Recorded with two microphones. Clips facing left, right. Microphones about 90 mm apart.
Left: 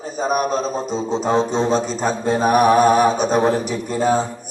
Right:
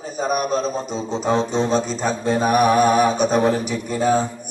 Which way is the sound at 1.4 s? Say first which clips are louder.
Left 2 dB; 35° left (ahead or behind).